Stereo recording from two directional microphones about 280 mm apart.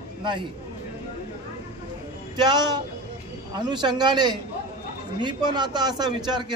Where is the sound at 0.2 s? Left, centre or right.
Centre.